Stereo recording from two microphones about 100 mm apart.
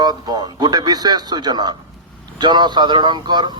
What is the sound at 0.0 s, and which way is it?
A man's voice, 45° right (ahead or behind).